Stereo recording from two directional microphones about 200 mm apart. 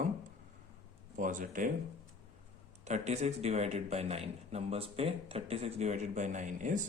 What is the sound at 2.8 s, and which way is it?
A man's voice, 35° right (ahead or behind).